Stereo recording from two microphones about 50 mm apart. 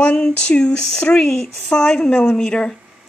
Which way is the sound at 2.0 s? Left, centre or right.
Left.